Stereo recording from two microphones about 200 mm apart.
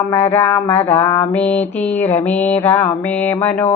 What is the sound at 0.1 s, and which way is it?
Mantra, 10° left (ahead or behind).